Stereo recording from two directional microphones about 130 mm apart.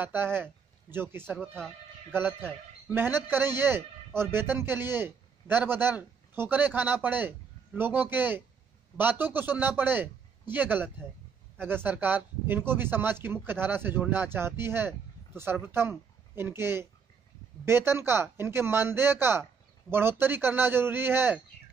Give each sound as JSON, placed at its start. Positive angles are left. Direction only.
{"t": 0.0, "sound": "a man's voice", "side_deg": -15}
{"t": 2.9, "sound": "a man's voice", "side_deg": -15}